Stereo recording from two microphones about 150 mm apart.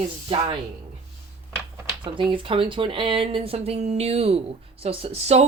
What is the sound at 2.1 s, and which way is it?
Speech, 35° right (ahead or behind).